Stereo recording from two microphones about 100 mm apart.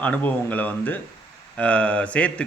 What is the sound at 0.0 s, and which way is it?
Speech, 15° left (ahead or behind).